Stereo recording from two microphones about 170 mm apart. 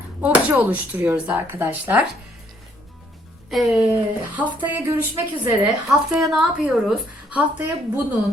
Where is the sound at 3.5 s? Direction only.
5° right (ahead or behind).